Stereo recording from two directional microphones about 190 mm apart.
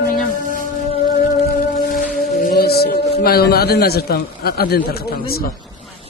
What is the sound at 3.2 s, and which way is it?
A man's voice, 55° left (ahead or behind).